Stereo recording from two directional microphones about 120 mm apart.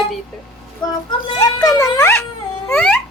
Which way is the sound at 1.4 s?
30° left (ahead or behind).